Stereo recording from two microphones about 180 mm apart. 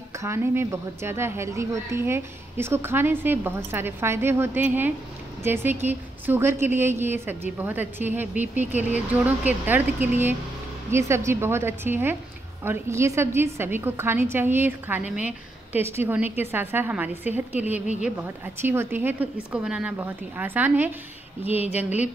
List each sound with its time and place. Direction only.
0.2 s a woman's voice: 15° right (ahead or behind)
21.5 s speech: 35° left (ahead or behind)
21.7 s a woman's voice: 10° right (ahead or behind)